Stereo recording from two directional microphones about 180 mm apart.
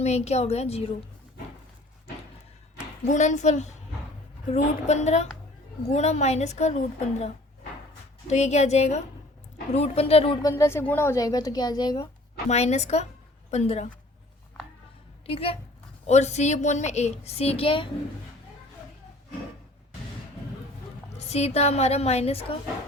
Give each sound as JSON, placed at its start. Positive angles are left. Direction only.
{"t": 0.0, "sound": "speech", "side_deg": 35}
{"t": 3.0, "sound": "speech", "side_deg": 40}
{"t": 8.3, "sound": "speech", "side_deg": 40}
{"t": 10.4, "sound": "speech", "side_deg": 15}
{"t": 12.5, "sound": "speech", "side_deg": 40}
{"t": 15.3, "sound": "speech", "side_deg": 30}
{"t": 21.2, "sound": "speech", "side_deg": 35}